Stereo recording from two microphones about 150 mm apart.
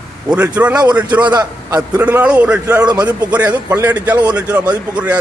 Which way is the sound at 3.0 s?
10° right (ahead or behind).